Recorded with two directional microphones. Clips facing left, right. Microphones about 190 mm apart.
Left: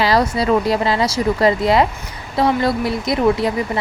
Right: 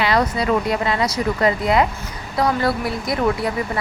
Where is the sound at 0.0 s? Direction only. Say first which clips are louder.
Left 3 dB; 35° left (ahead or behind).